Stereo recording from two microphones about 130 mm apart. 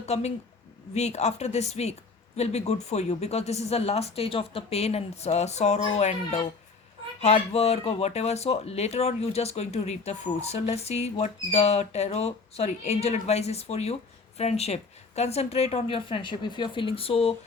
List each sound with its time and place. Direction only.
0.0 s a woman's voice: 55° left (ahead or behind)